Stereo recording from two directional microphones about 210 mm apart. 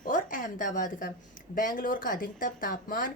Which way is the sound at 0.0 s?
40° left (ahead or behind).